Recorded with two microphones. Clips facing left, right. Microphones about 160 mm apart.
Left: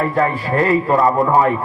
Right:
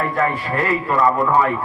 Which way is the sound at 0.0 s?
30° left (ahead or behind).